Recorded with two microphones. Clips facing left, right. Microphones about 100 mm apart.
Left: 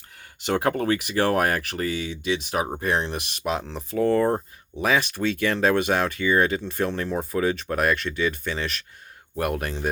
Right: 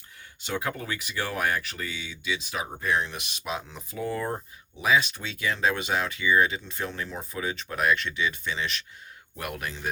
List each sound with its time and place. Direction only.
0.4 s speech: 75° left (ahead or behind); by 9.9 s 55° left (ahead or behind)